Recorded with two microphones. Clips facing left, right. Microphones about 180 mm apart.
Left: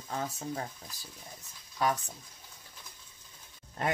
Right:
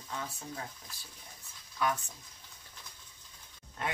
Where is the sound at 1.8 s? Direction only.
35° left (ahead or behind).